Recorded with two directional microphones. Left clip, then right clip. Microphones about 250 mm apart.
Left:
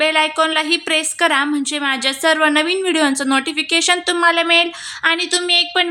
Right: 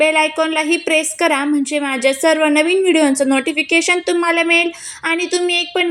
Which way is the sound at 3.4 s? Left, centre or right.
Left.